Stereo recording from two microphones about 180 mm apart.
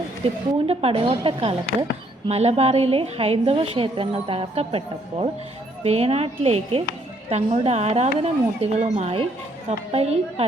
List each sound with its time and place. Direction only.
0.2 s a woman's voice: 35° right (ahead or behind)
5.8 s a woman's voice: 35° right (ahead or behind)